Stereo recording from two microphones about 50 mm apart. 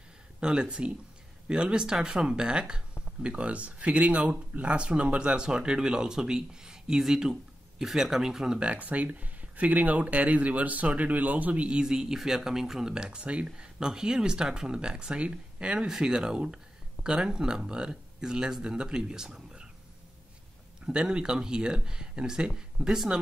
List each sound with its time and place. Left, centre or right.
0.4 s speech: centre
8.5 s speech: right
11.8 s speech: centre
20.8 s speech: centre